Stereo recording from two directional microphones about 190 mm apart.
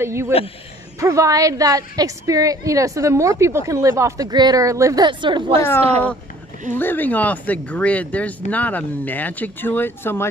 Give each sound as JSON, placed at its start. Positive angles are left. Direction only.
{"t": 0.0, "sound": "a woman's voice", "side_deg": -15}
{"t": 6.7, "sound": "speech", "side_deg": 10}